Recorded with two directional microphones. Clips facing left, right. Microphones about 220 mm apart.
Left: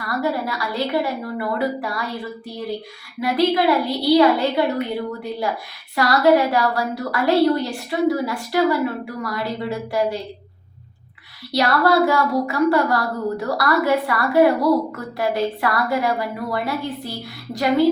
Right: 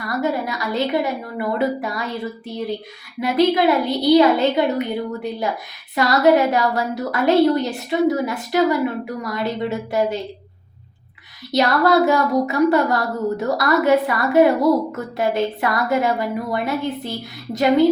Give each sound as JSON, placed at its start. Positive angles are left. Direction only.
{"t": 0.0, "sound": "a woman's voice", "side_deg": -20}
{"t": 3.2, "sound": "a woman's voice", "side_deg": -20}
{"t": 6.0, "sound": "a woman's voice", "side_deg": -20}
{"t": 11.5, "sound": "a woman's voice", "side_deg": -20}